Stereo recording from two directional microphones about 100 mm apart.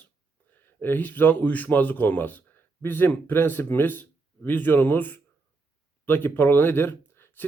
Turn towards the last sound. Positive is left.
turn(degrees=20)  # may be behind; listen again after turning